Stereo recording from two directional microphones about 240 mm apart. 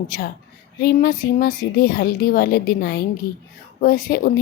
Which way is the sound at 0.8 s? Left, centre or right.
Left.